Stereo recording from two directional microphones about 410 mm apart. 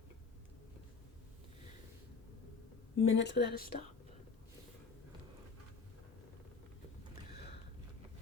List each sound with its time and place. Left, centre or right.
3.0 s speech: left